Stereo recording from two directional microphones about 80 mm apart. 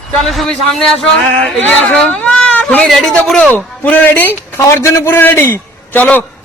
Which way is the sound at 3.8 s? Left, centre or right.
Left.